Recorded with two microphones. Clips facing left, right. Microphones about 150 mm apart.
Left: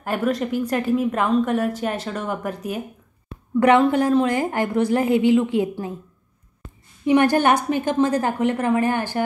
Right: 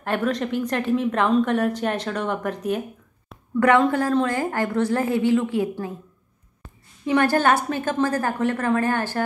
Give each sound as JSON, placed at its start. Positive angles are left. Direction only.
{"t": 0.0, "sound": "a woman's voice", "side_deg": 5}
{"t": 3.5, "sound": "a woman's voice", "side_deg": 20}
{"t": 7.1, "sound": "a woman's voice", "side_deg": 15}